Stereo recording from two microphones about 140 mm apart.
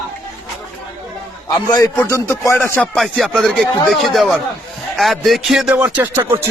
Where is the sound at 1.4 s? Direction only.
25° left (ahead or behind).